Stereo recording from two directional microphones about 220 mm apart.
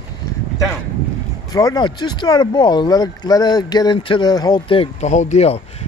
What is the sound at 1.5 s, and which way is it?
Speech, 15° left (ahead or behind).